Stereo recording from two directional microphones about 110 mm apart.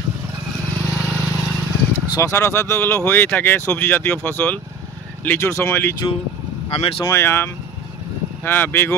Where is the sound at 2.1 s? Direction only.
25° left (ahead or behind).